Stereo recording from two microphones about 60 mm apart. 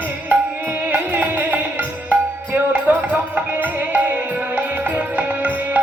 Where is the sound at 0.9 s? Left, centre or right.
Right.